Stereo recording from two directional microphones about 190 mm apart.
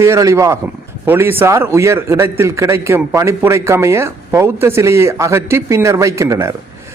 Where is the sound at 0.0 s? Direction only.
15° right (ahead or behind).